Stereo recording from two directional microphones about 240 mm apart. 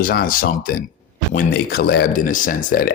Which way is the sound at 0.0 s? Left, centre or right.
Left.